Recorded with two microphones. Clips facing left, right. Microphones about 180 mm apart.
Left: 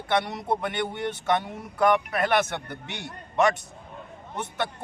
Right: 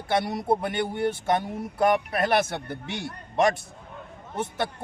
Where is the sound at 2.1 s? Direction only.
30° right (ahead or behind).